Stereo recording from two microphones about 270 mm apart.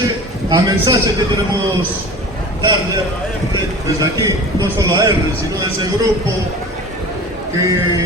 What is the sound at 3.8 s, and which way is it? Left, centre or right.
A man's voice, centre.